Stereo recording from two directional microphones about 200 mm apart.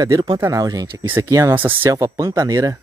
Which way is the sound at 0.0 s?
20° right (ahead or behind).